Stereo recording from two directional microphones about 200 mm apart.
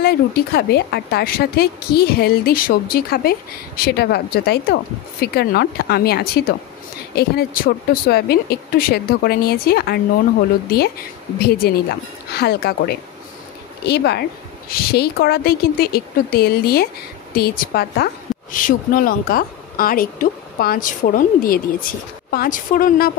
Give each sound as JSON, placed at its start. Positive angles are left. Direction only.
{"t": 0.0, "sound": "a woman's voice", "side_deg": 55}
{"t": 11.3, "sound": "a woman's voice", "side_deg": 50}